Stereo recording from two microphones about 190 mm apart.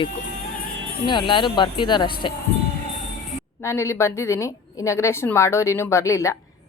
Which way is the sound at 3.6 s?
15° left (ahead or behind).